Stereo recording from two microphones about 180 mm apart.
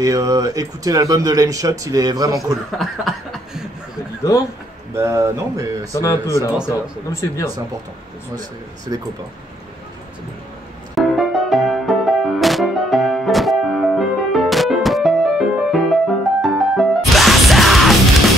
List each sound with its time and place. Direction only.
0.0 s speech: 20° right (ahead or behind)
2.8 s chuckle: centre (ahead or behind)
4.2 s speech: 15° left (ahead or behind)
4.9 s speech: 15° right (ahead or behind)
6.0 s speech: 15° left (ahead or behind)
8.9 s speech: 20° right (ahead or behind)
11.0 s music: centre (ahead or behind)